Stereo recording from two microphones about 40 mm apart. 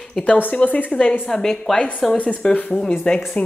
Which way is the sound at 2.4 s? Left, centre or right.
Centre.